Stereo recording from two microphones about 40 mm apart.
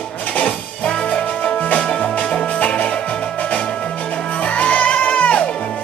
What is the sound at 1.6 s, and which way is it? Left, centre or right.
Music, left.